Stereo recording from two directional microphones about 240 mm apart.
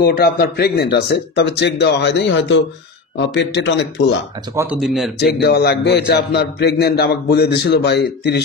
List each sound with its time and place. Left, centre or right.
0.0 s a man's voice: left
4.6 s speech: centre
5.4 s a man's voice: left